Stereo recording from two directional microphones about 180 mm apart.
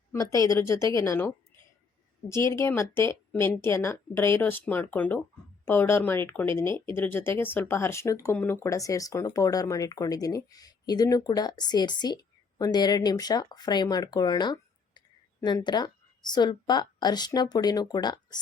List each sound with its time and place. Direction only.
0.1 s speech: 20° left (ahead or behind)
2.3 s speech: 15° left (ahead or behind)